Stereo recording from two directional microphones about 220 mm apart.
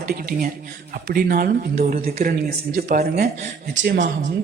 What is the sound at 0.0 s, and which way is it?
A man's voice, 40° right (ahead or behind).